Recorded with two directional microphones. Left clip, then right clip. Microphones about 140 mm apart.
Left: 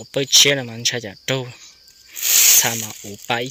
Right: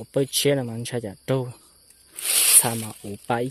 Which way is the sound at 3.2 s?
30° right (ahead or behind).